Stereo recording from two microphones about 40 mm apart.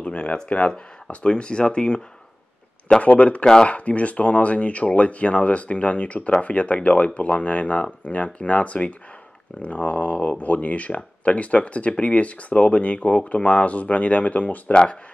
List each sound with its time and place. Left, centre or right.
0.0 s a sound: left
0.5 s speech: left
3.0 s speech: left
14.7 s speech: left